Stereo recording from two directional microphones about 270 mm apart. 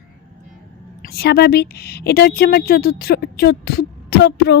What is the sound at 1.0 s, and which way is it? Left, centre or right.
A woman's voice, left.